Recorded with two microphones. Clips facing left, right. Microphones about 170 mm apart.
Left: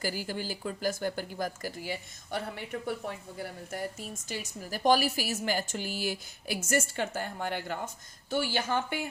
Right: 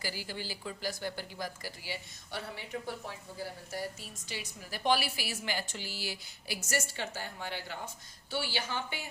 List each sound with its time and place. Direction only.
0.0 s a woman's voice: 45° left (ahead or behind)